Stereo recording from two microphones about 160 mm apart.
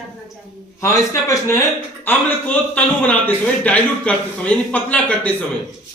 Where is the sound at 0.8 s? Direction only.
20° left (ahead or behind).